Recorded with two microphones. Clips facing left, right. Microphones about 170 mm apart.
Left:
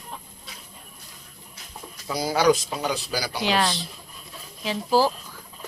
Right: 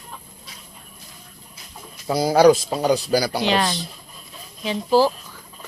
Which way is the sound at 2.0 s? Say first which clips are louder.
Right 6 dB; 40° right (ahead or behind).